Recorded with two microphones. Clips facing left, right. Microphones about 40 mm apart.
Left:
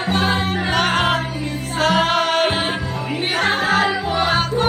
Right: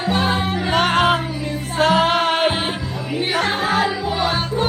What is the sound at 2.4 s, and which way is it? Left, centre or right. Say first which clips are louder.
Music: even; left.